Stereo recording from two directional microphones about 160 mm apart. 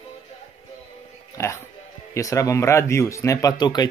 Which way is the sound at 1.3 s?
15° left (ahead or behind).